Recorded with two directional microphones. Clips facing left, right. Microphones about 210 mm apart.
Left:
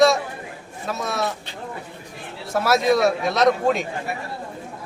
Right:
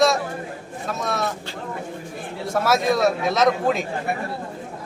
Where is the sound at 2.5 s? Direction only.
Centre (ahead or behind).